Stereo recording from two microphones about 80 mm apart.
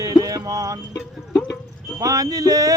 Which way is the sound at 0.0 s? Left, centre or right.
Right.